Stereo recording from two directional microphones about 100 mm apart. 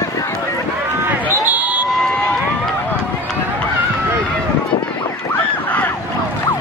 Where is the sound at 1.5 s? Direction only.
15° right (ahead or behind).